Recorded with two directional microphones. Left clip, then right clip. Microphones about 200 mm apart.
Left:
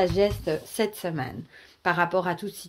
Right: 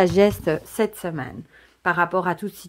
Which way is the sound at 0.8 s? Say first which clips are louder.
Right 3 dB; 25° right (ahead or behind).